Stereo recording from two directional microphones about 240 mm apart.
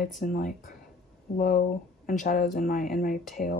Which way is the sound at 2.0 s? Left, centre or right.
Left.